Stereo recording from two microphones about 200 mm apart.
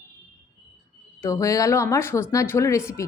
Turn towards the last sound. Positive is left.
turn(degrees=15)  # may be behind; listen again after turning